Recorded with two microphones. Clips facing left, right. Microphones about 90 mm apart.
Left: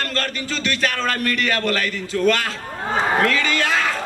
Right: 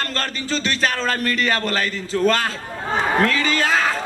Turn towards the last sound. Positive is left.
turn(degrees=-35)  # may be behind; listen again after turning